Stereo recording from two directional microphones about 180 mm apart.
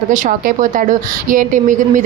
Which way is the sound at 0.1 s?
45° right (ahead or behind).